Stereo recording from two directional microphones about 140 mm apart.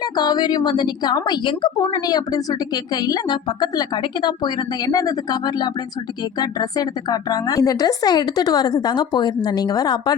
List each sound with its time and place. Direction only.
0.0 s a woman's voice: 30° left (ahead or behind)